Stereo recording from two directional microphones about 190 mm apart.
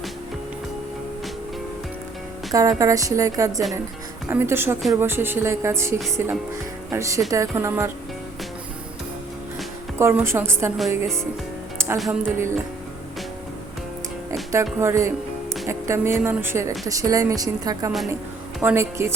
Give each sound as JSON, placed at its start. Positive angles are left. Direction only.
{"t": 2.5, "sound": "speech", "side_deg": -20}
{"t": 10.0, "sound": "speech", "side_deg": -15}
{"t": 10.8, "sound": "speech", "side_deg": 0}
{"t": 14.5, "sound": "speech", "side_deg": -15}